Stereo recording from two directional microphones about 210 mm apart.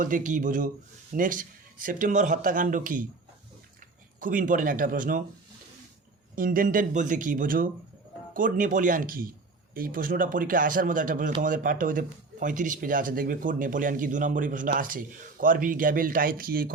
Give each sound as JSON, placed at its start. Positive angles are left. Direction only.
{"t": 0.0, "sound": "speech", "side_deg": -40}
{"t": 4.2, "sound": "speech", "side_deg": -40}
{"t": 6.3, "sound": "speech", "side_deg": -40}